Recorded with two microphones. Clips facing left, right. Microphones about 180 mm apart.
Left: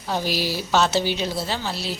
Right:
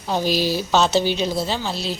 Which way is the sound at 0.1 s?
20° right (ahead or behind).